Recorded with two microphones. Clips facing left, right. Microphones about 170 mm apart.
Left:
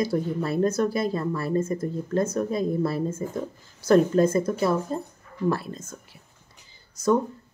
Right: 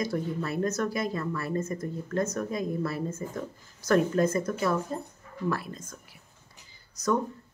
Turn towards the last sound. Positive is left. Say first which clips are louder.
# left 5 dB
turn(degrees=25)  # may be behind; listen again after turning